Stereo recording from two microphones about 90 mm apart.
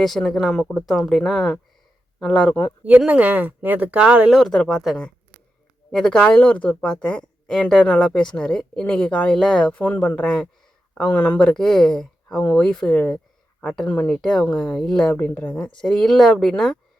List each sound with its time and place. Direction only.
0.0 s speech: centre (ahead or behind)
3.1 s speech: 15° right (ahead or behind)
4.4 s speech: 5° left (ahead or behind)
14.2 s speech: 5° left (ahead or behind)
15.8 s speech: 5° left (ahead or behind)